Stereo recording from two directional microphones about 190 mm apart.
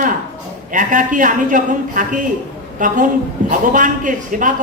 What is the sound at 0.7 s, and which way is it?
A woman's voice, 45° right (ahead or behind).